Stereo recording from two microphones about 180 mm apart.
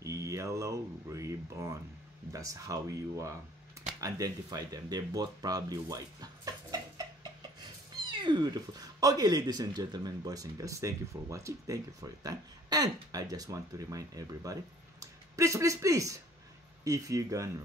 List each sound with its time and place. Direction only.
0.0 s speech: 15° right (ahead or behind)